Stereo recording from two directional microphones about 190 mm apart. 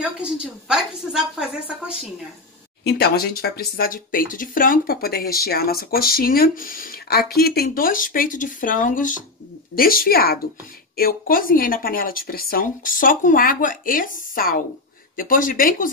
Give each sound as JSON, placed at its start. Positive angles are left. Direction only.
{"t": 0.0, "sound": "a woman's voice", "side_deg": -5}
{"t": 2.8, "sound": "speech", "side_deg": 55}